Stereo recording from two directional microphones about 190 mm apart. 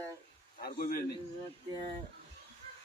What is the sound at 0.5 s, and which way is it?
Speech, 50° left (ahead or behind).